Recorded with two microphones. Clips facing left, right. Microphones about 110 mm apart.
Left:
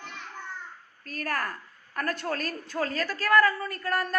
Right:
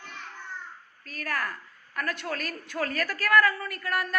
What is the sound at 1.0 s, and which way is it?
A woman's voice, 40° left (ahead or behind).